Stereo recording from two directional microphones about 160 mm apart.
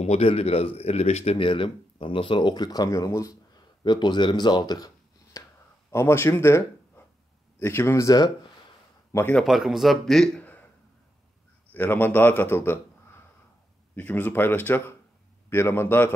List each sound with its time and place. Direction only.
0.0 s a man's voice: 40° left (ahead or behind); by 9.4 s 10° left (ahead or behind)
9.4 s speech: centre (ahead or behind)
11.7 s a man's voice: 10° left (ahead or behind)